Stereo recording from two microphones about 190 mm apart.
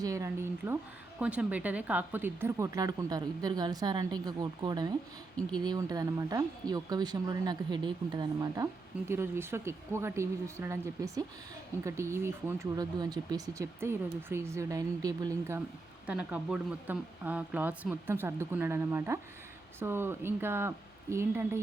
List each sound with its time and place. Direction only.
0.0 s speech: 15° right (ahead or behind)